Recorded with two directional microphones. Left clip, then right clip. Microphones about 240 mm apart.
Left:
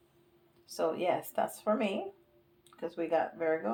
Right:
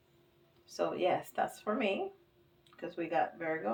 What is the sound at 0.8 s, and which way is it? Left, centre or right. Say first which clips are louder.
Speech: left 1 dB; left.